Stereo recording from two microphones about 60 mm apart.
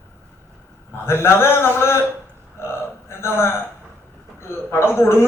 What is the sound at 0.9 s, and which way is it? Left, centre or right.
A man's voice, left.